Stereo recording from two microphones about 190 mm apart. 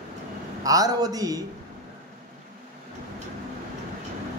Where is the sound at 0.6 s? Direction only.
20° right (ahead or behind).